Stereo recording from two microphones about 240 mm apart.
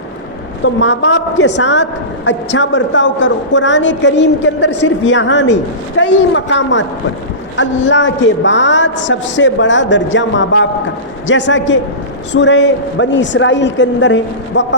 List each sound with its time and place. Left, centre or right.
0.6 s a woman's voice: left